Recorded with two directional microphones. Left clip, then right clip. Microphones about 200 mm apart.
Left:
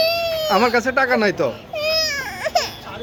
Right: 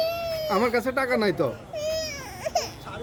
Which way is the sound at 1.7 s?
10° left (ahead or behind).